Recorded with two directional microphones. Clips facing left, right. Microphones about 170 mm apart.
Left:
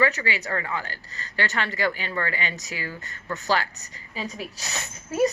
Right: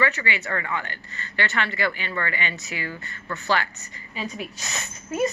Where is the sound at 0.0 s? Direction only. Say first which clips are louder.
Left 1 dB; 40° left (ahead or behind).